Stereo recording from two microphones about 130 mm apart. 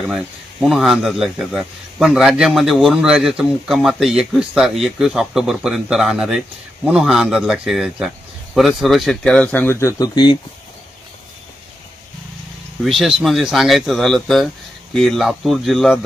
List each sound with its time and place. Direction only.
0.0 s speech: 5° right (ahead or behind); by 10.3 s 30° left (ahead or behind)
12.8 s speech: centre (ahead or behind)